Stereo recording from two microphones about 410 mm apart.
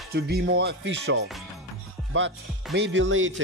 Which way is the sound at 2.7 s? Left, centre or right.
Right.